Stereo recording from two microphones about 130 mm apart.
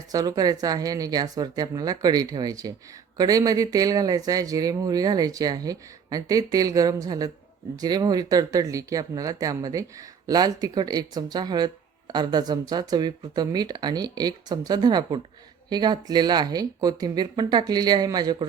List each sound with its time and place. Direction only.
0.1 s speech: 30° right (ahead or behind)